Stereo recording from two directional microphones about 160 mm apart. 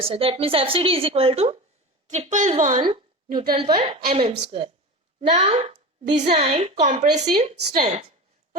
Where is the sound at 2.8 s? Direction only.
30° right (ahead or behind).